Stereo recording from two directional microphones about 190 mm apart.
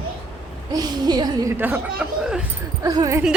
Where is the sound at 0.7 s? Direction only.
20° right (ahead or behind); by 2.4 s 5° right (ahead or behind).